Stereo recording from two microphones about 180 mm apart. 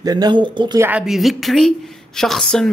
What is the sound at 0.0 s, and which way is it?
Speech, 20° right (ahead or behind).